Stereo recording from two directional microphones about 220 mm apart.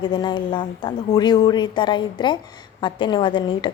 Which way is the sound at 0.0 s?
20° left (ahead or behind).